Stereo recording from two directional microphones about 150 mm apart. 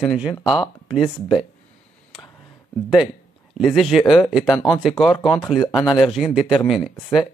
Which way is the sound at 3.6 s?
Centre (ahead or behind).